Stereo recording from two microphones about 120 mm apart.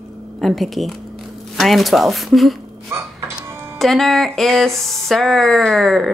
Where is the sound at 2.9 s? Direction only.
20° right (ahead or behind).